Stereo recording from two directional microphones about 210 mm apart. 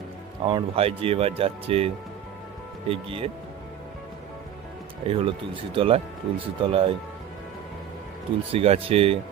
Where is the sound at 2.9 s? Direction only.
25° right (ahead or behind).